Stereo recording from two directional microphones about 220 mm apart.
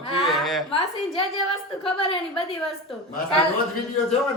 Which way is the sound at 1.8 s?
25° left (ahead or behind).